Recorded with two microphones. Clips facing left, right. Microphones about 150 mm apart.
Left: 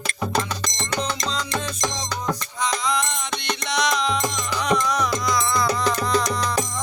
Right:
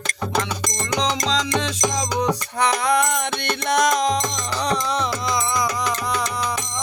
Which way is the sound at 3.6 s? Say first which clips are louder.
Right 5 dB; 50° right (ahead or behind).